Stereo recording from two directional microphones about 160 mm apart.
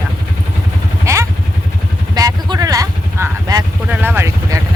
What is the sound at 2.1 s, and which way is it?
Vehicle, 25° right (ahead or behind).